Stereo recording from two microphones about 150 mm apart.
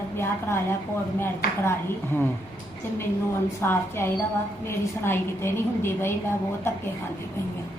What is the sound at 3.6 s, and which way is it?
A woman's voice, 15° left (ahead or behind).